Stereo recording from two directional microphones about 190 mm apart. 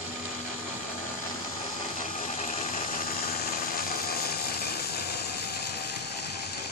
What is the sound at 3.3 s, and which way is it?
Engine, 55° left (ahead or behind).